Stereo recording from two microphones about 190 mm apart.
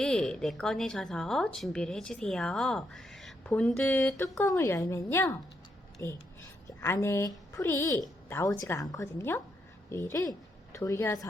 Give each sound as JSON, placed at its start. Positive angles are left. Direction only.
{"t": 0.0, "sound": "a woman's voice", "side_deg": 5}